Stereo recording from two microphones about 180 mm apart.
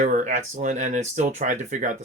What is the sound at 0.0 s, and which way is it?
Speech, 45° right (ahead or behind).